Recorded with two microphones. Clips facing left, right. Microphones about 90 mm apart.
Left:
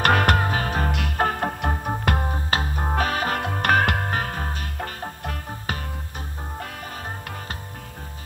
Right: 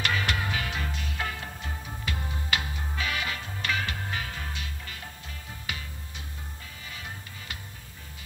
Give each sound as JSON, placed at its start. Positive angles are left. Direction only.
{"t": 0.0, "sound": "music", "side_deg": 55}
{"t": 3.3, "sound": "music", "side_deg": 60}